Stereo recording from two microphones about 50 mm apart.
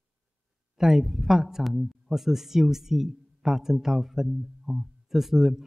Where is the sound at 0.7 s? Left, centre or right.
Centre.